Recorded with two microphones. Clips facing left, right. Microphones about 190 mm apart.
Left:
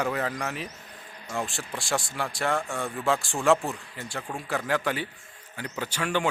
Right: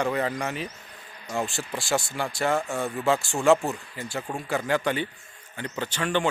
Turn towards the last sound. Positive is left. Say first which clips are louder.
# right 2 dB
turn(degrees=5)  # may be behind; listen again after turning